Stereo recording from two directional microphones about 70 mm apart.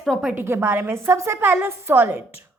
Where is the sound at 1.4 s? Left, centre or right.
Right.